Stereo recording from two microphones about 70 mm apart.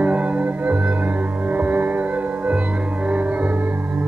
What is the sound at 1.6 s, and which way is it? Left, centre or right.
Music, right.